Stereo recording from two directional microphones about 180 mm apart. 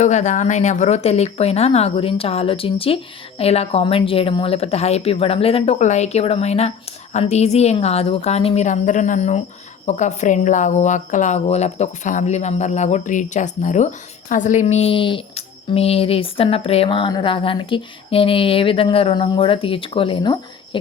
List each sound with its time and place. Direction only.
0.0 s a woman's voice: 40° left (ahead or behind); by 20.4 s 25° left (ahead or behind)